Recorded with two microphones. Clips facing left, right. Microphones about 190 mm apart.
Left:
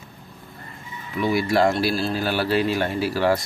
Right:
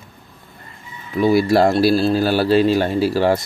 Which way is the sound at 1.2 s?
35° right (ahead or behind).